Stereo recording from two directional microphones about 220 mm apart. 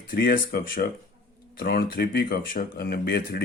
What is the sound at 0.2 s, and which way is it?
Speech, 40° left (ahead or behind).